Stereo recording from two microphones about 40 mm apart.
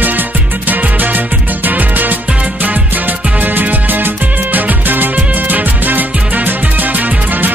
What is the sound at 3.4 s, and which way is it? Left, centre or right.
Music, right.